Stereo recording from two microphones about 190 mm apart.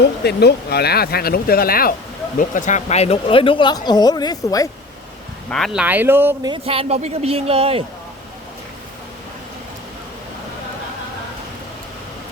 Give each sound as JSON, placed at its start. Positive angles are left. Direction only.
{"t": 0.0, "sound": "speech", "side_deg": 60}
{"t": 2.4, "sound": "speech", "side_deg": 40}
{"t": 5.5, "sound": "speech", "side_deg": 0}
{"t": 6.5, "sound": "speech", "side_deg": -30}